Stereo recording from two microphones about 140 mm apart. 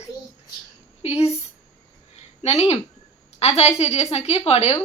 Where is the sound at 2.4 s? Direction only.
50° left (ahead or behind).